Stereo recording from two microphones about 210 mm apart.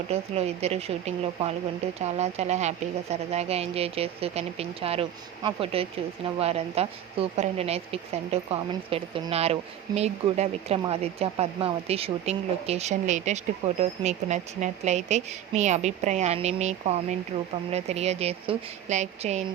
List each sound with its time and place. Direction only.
0.1 s a woman's voice: 30° right (ahead or behind)